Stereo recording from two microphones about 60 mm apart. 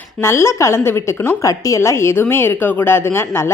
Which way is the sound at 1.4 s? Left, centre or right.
Left.